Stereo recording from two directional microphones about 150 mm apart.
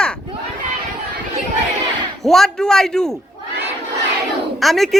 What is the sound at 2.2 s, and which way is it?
Speech, centre (ahead or behind).